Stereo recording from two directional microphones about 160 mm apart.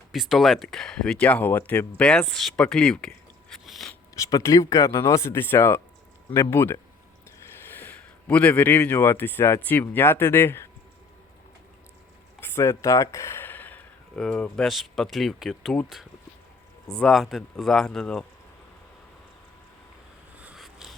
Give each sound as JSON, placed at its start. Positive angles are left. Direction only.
{"t": 0.1, "sound": "speech", "side_deg": 0}
{"t": 4.1, "sound": "speech", "side_deg": 20}
{"t": 12.4, "sound": "speech", "side_deg": 15}
{"t": 20.3, "sound": "a sound", "side_deg": -10}